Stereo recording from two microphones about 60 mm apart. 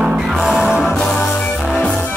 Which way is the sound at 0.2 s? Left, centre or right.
Centre.